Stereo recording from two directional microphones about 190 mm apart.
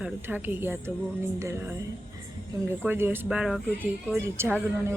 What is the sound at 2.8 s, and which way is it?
A woman's voice, 10° right (ahead or behind).